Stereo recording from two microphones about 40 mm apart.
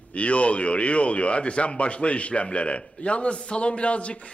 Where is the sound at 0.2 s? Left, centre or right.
Left.